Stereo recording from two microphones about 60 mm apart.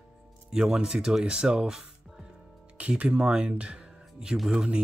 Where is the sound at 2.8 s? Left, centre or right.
Right.